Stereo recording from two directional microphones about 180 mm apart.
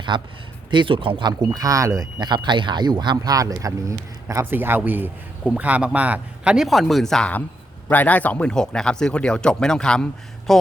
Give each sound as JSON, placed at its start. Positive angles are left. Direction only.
{"t": 0.1, "sound": "speech", "side_deg": -25}